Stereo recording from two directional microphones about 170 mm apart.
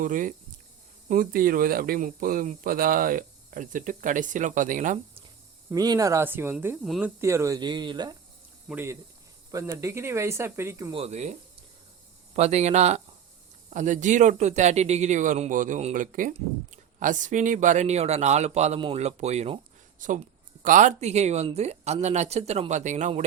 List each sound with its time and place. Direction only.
0.0 s speech: 50° right (ahead or behind)
5.7 s speech: 20° right (ahead or behind)
6.8 s speech: centre (ahead or behind)
7.2 s speech: 15° right (ahead or behind)
8.7 s speech: 15° right (ahead or behind)
10.9 s speech: 40° right (ahead or behind)